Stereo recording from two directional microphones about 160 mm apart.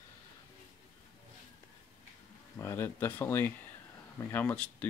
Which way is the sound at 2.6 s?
15° left (ahead or behind).